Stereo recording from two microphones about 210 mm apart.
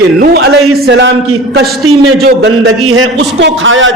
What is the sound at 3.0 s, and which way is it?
Speech, 60° right (ahead or behind).